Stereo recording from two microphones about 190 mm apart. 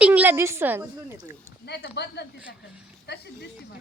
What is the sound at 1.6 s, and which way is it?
Speech, 60° left (ahead or behind).